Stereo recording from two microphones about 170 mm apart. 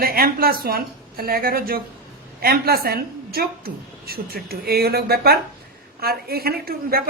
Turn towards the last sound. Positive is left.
turn(degrees=-60)  # may be behind; listen again after turning